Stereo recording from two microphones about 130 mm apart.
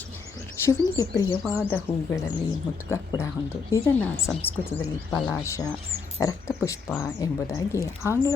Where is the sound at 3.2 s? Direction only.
20° left (ahead or behind).